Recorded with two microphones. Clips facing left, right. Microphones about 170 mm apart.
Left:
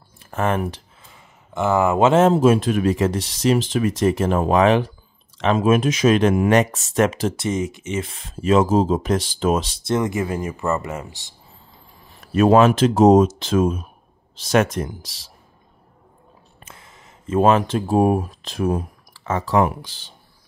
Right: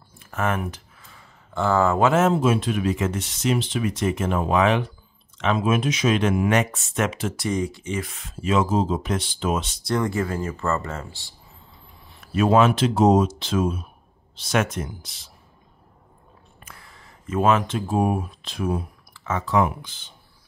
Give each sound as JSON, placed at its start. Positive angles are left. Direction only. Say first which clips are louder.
{"t": 0.2, "sound": "speech", "louder": "left 4 dB", "side_deg": 30}
{"t": 1.1, "sound": "speech", "louder": "left 1 dB", "side_deg": 20}
{"t": 9.8, "sound": "speech", "louder": "left 2 dB", "side_deg": 20}
{"t": 12.1, "sound": "speech", "louder": "left 5 dB", "side_deg": 45}
{"t": 16.5, "sound": "a sound", "louder": "left 2 dB", "side_deg": 25}
{"t": 17.4, "sound": "speech", "louder": "left 4 dB", "side_deg": 35}